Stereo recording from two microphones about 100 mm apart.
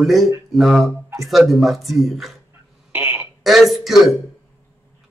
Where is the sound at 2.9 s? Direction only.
15° right (ahead or behind).